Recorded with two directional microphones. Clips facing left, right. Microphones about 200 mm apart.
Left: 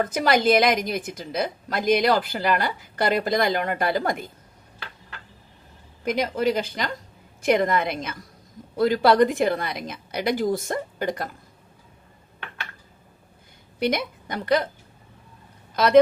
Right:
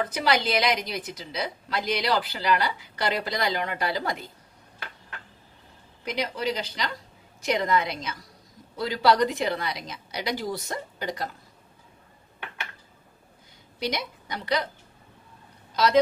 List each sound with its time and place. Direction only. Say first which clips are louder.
0.0 s a woman's voice: left 5 dB; 50° left (ahead or behind)
6.0 s a woman's voice: left 6 dB; 50° left (ahead or behind)
13.7 s a woman's voice: left 6 dB; 55° left (ahead or behind)
15.7 s speech: left 5 dB; 55° left (ahead or behind)